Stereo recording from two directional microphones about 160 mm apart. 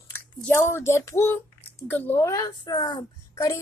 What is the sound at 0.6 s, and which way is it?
Child singing, 15° left (ahead or behind).